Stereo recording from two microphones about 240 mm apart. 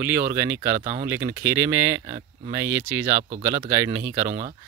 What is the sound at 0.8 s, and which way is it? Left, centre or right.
Speech, right.